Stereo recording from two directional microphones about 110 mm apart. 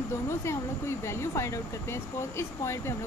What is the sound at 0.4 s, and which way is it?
Speech, 25° left (ahead or behind).